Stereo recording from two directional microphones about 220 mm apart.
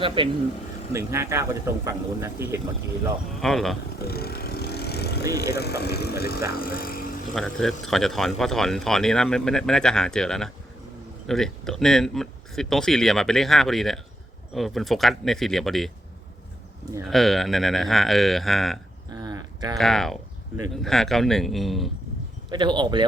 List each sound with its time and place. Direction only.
0.0 s speech: 25° right (ahead or behind)
0.9 s speech: 10° right (ahead or behind)
3.4 s speech: centre (ahead or behind)
3.9 s vehicle: 45° left (ahead or behind)
5.5 s speech: 50° left (ahead or behind)
7.3 s speech: centre (ahead or behind)
17.1 s speech: centre (ahead or behind)
19.1 s a sound: 20° right (ahead or behind)
19.7 s speech: centre (ahead or behind)
22.4 s speech: 20° right (ahead or behind)